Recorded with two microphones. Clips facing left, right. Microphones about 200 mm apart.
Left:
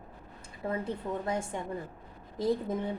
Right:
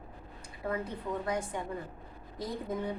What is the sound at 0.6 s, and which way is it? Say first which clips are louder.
Speech: left 2 dB; 25° left (ahead or behind).